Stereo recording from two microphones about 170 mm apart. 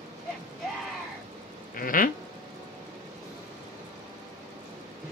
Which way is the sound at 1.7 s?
55° left (ahead or behind).